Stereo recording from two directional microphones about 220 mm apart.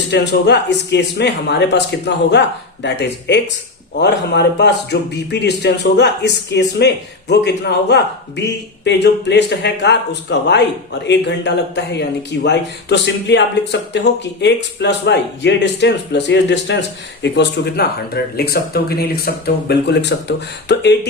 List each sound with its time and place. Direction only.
0.1 s a man's voice: 50° left (ahead or behind)